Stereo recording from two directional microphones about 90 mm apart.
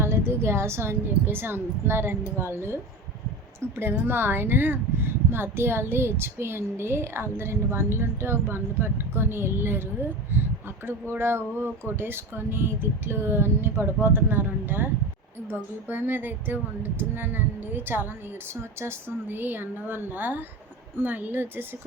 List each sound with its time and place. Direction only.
0.0 s speech: 25° right (ahead or behind)
3.8 s speech: 25° right (ahead or behind)